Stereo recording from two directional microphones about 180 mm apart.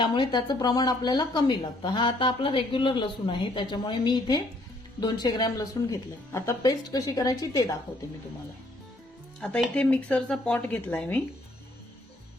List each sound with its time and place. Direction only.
0.0 s speech: 25° left (ahead or behind)
9.4 s speech: 5° left (ahead or behind)